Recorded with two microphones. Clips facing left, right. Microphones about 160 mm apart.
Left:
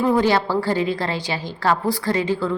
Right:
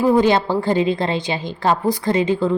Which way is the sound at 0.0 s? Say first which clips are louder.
Right 3 dB; 15° right (ahead or behind).